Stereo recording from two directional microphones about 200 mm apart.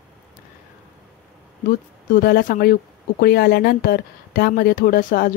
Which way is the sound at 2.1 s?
50° left (ahead or behind).